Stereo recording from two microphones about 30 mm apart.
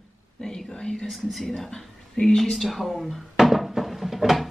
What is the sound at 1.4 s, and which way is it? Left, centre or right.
Speech, centre.